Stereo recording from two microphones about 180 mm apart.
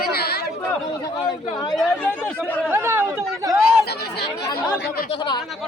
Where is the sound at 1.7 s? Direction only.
5° left (ahead or behind).